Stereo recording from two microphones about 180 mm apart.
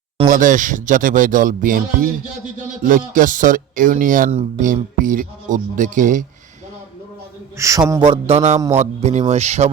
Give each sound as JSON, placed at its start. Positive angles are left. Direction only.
{"t": 0.3, "sound": "speech", "side_deg": -45}
{"t": 4.3, "sound": "speech", "side_deg": -35}
{"t": 4.7, "sound": "speech", "side_deg": -45}
{"t": 7.5, "sound": "a man's voice", "side_deg": -15}